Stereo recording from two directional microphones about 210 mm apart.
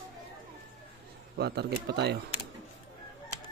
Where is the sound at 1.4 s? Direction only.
50° right (ahead or behind).